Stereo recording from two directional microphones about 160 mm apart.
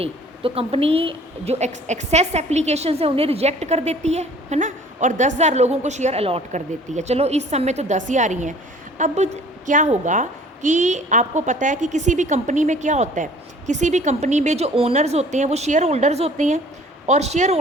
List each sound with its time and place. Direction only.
0.0 s a woman's voice: 40° right (ahead or behind)